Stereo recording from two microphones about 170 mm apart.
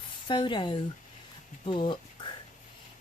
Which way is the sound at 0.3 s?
30° left (ahead or behind).